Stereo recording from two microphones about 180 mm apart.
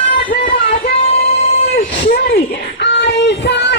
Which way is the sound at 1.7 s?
55° left (ahead or behind).